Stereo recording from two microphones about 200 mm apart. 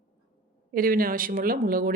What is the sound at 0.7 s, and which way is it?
Speech, 45° right (ahead or behind).